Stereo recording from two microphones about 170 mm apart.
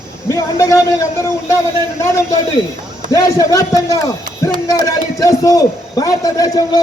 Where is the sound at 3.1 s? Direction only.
20° left (ahead or behind).